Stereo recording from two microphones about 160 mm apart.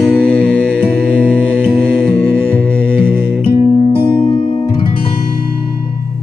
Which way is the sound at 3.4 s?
40° left (ahead or behind).